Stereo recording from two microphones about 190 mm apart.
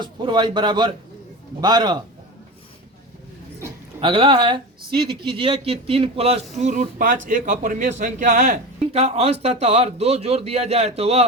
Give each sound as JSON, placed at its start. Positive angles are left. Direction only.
{"t": 0.0, "sound": "a man's voice", "side_deg": -25}
{"t": 4.0, "sound": "a man's voice", "side_deg": -25}